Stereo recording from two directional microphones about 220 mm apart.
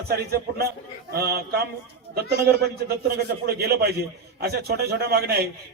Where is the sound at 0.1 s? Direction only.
45° right (ahead or behind).